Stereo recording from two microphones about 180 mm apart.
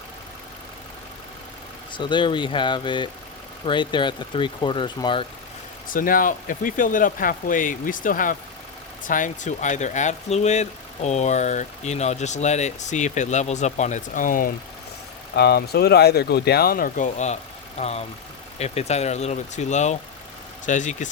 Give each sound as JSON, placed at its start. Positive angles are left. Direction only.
{"t": 1.9, "sound": "speech", "side_deg": 25}
{"t": 5.9, "sound": "speech", "side_deg": 50}
{"t": 15.4, "sound": "speech", "side_deg": 60}